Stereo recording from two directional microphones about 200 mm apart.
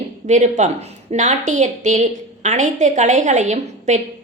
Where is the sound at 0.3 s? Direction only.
35° right (ahead or behind).